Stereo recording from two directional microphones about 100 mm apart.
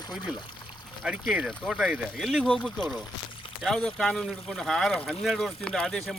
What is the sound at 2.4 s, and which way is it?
Speech, 10° left (ahead or behind).